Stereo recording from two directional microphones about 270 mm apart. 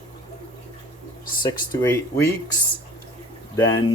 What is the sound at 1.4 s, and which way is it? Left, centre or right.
Speech, centre.